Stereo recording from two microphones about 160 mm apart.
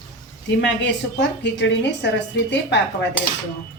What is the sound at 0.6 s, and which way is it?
A woman's voice, 90° left.